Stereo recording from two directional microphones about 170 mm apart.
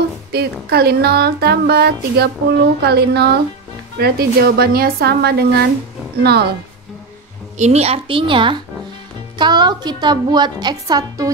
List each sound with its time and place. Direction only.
0.3 s speech: 70° right (ahead or behind)
7.5 s a woman's voice: 40° right (ahead or behind); by 11.2 s 20° right (ahead or behind)